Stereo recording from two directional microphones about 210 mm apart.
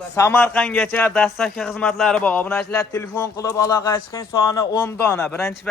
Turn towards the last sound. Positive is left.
turn(degrees=10)  # may be behind; listen again after turning